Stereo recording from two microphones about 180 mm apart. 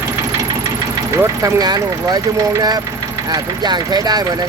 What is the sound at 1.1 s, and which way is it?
Speech, 15° right (ahead or behind).